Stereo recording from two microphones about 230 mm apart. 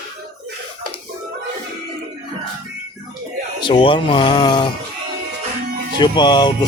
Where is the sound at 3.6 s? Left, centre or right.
Left.